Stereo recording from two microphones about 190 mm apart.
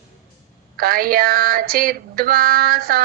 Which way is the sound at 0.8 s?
50° right (ahead or behind).